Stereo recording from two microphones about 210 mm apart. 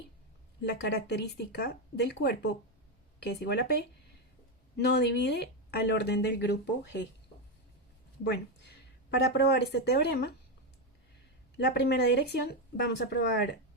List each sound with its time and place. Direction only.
0.6 s speech: 50° left (ahead or behind)
4.8 s speech: 55° left (ahead or behind)
8.2 s speech: 50° left (ahead or behind)
11.5 s speech: 55° left (ahead or behind)